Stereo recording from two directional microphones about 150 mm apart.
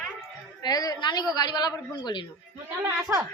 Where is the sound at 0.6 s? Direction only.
25° left (ahead or behind).